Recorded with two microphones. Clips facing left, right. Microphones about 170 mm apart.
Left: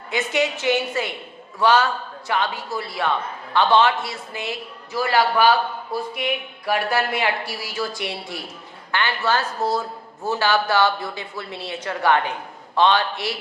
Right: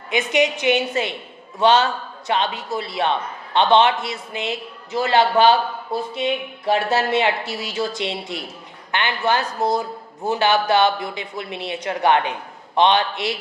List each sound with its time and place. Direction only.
0.1 s a man's voice: 20° right (ahead or behind)